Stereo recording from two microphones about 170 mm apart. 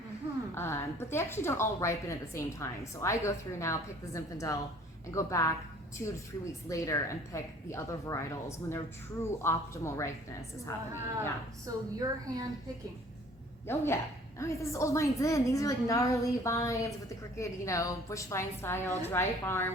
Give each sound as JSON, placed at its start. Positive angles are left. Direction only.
{"t": 0.5, "sound": "a woman's voice", "side_deg": 15}
{"t": 11.6, "sound": "a woman's voice", "side_deg": -20}
{"t": 13.7, "sound": "a woman's voice", "side_deg": 15}